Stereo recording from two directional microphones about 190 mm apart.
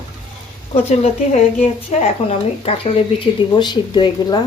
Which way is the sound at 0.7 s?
35° left (ahead or behind).